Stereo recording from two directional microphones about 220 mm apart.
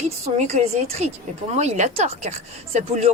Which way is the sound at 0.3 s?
30° right (ahead or behind).